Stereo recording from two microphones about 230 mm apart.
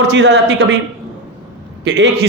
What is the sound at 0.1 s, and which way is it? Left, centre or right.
Speech, right.